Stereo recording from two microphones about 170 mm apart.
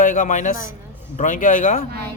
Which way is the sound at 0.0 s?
50° left (ahead or behind).